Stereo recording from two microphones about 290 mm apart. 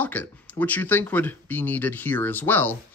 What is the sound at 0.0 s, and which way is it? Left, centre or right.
Speech, centre.